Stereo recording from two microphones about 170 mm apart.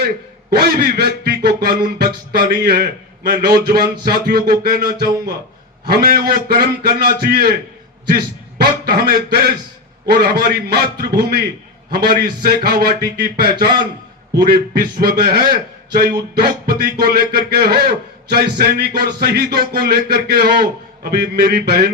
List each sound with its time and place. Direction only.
0.5 s a man's voice: 70° right (ahead or behind)